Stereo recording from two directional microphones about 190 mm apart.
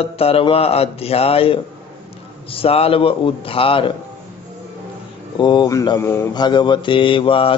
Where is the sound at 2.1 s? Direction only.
30° left (ahead or behind).